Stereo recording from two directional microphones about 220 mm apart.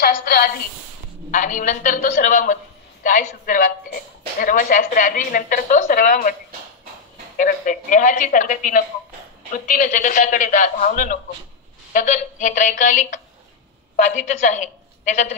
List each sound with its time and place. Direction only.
0.0 s a sound: 40° left (ahead or behind)
1.3 s a man's voice: 35° left (ahead or behind)
7.3 s a woman's voice: 35° left (ahead or behind)